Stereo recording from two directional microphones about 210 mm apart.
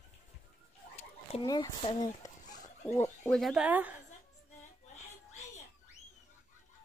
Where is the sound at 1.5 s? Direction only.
20° left (ahead or behind).